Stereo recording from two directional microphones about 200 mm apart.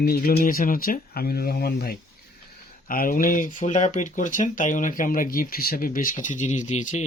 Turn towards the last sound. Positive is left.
turn(degrees=35)  # may be behind; listen again after turning